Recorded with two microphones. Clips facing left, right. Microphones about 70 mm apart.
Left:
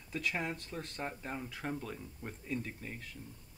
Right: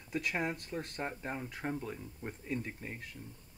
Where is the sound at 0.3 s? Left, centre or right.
Centre.